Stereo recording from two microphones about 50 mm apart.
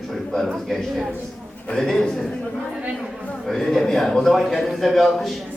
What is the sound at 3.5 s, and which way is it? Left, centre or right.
Speech, centre.